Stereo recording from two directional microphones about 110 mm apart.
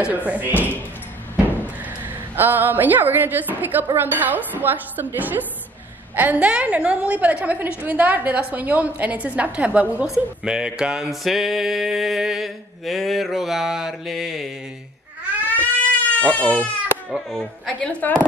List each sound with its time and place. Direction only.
0.0 s a woman's voice: 15° right (ahead or behind)
2.3 s a woman's voice: 15° right (ahead or behind); by 14.5 s centre (ahead or behind)
15.5 s goat: 15° left (ahead or behind)
17.1 s speech: 5° left (ahead or behind)